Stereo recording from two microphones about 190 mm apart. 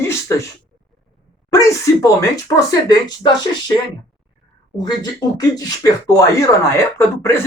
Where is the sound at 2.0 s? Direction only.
20° left (ahead or behind).